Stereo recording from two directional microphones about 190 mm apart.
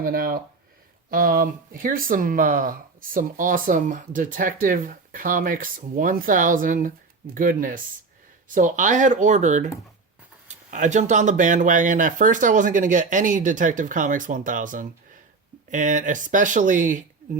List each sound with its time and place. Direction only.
0.0 s speech: 50° right (ahead or behind)